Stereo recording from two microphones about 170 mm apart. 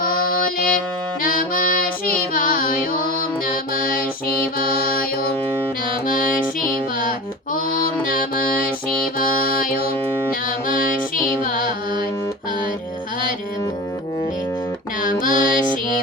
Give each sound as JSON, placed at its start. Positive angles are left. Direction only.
{"t": 0.0, "sound": "music", "side_deg": 55}
{"t": 4.6, "sound": "music", "side_deg": 60}
{"t": 6.1, "sound": "music", "side_deg": 55}
{"t": 7.5, "sound": "mantra", "side_deg": 55}
{"t": 8.1, "sound": "music", "side_deg": 55}
{"t": 15.0, "sound": "mantra", "side_deg": 50}